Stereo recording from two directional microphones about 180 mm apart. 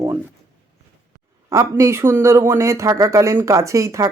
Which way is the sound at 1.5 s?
15° right (ahead or behind).